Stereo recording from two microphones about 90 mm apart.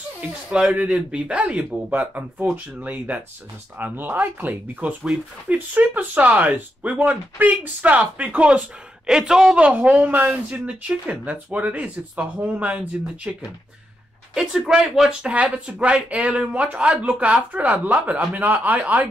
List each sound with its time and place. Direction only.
0.2 s speech: 10° right (ahead or behind)